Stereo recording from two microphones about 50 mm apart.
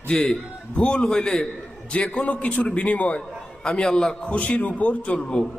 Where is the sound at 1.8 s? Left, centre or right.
Left.